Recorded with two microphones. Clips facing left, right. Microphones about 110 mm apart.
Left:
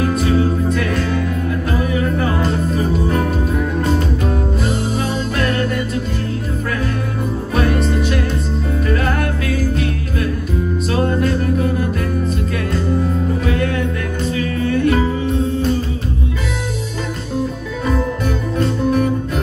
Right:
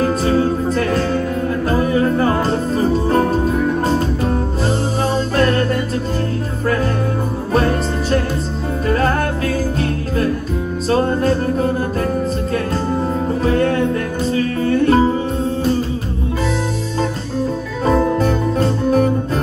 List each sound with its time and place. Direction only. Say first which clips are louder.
0.0 s music: right 1 dB; 30° right (ahead or behind)
5.4 s music: right 4 dB; 35° right (ahead or behind)
7.5 s music: right 1 dB; 35° right (ahead or behind)
10.9 s music: right 3 dB; 30° right (ahead or behind)
13.5 s music: right 4 dB; 35° right (ahead or behind)
17.8 s music: right 5 dB; 35° right (ahead or behind)